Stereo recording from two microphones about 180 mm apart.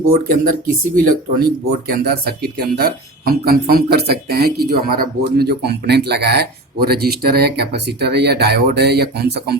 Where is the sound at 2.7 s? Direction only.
60° right (ahead or behind).